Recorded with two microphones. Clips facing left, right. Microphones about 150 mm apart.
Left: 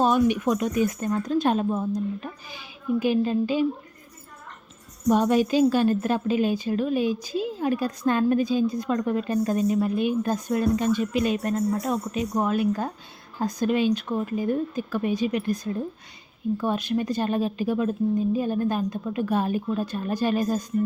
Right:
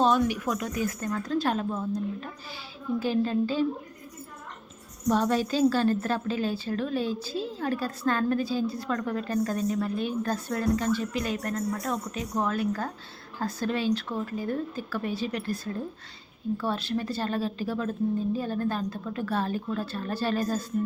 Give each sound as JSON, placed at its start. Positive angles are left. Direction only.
{"t": 0.0, "sound": "a sound", "side_deg": 10}
{"t": 0.3, "sound": "a woman's voice", "side_deg": 25}
{"t": 5.0, "sound": "a woman's voice", "side_deg": 15}